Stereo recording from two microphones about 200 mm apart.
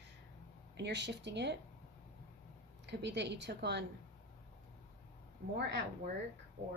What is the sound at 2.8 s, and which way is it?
Speech, 60° right (ahead or behind).